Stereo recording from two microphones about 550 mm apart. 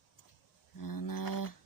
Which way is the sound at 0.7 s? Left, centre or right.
Left.